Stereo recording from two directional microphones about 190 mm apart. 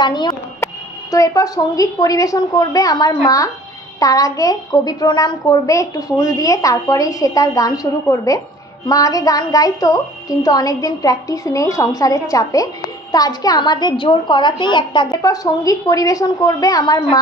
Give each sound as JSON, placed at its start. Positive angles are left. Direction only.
{"t": 0.0, "sound": "a woman's voice", "side_deg": 25}